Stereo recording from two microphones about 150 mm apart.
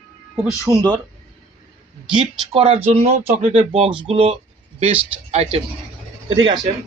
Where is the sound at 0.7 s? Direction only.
20° right (ahead or behind).